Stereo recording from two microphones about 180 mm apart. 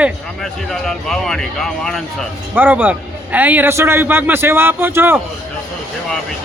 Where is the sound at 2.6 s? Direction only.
10° right (ahead or behind).